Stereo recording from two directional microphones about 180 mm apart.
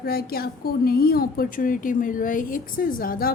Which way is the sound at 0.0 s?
60° left (ahead or behind).